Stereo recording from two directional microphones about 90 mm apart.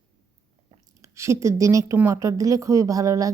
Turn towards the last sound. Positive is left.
turn(degrees=-40)  # may be behind; listen again after turning